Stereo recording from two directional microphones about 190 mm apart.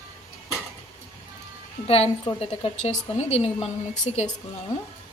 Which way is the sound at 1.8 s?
30° left (ahead or behind).